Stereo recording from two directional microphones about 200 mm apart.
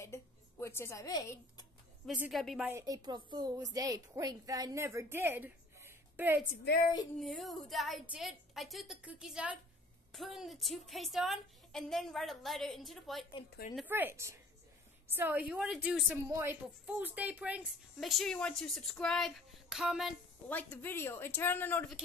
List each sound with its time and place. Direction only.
0.0 s a sound: 15° left (ahead or behind)
2.0 s speech: 5° right (ahead or behind)
2.7 s a woman's voice: 20° right (ahead or behind)
7.2 s a woman's voice: centre (ahead or behind)